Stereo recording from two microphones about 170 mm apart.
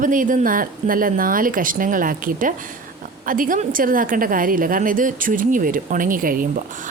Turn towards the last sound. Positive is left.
turn(degrees=-55)  # may be behind; listen again after turning